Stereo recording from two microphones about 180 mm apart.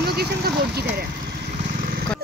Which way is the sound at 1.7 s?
55° right (ahead or behind).